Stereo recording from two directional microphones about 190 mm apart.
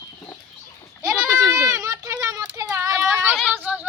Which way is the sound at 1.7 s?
15° right (ahead or behind).